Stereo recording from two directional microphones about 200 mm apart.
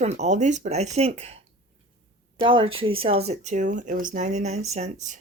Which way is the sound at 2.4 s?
25° right (ahead or behind).